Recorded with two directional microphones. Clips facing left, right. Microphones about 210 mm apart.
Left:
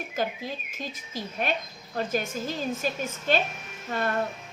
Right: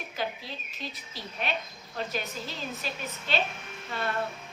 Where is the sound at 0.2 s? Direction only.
45° left (ahead or behind).